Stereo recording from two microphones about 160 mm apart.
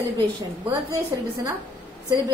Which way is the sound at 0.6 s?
20° right (ahead or behind).